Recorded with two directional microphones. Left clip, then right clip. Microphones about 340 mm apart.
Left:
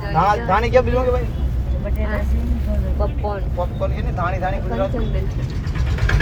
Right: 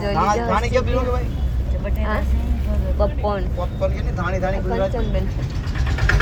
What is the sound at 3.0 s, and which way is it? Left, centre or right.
Speech, centre.